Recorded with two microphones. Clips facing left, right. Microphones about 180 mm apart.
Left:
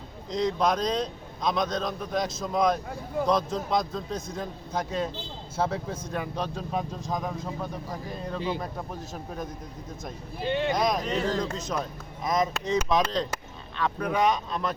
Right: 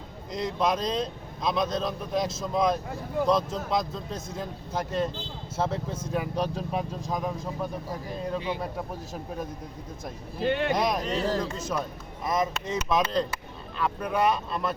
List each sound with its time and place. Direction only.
0.3 s speech: 5° right (ahead or behind)
10.4 s speech: 60° right (ahead or behind)
10.7 s speech: 5° right (ahead or behind)